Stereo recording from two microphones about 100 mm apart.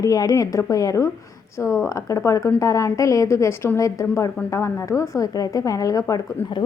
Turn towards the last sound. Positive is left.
turn(degrees=20)  # may be behind; listen again after turning